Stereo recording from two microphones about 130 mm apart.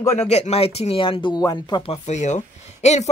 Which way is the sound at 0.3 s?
55° left (ahead or behind).